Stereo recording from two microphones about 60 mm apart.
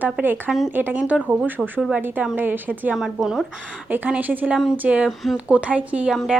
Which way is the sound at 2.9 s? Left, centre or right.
Centre.